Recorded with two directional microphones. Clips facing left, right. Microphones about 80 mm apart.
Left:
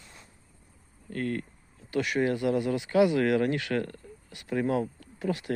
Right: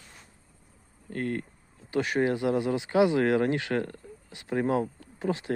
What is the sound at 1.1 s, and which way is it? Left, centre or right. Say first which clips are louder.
Speech: even; right.